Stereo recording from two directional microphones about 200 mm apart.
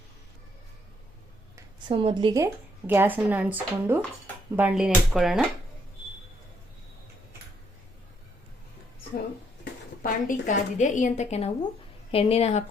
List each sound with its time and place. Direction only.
1.5 s speech: 25° right (ahead or behind); by 5.5 s centre (ahead or behind)
10.0 s a woman's voice: 40° left (ahead or behind)